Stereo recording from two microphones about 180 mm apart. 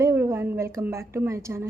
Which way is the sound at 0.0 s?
15° right (ahead or behind).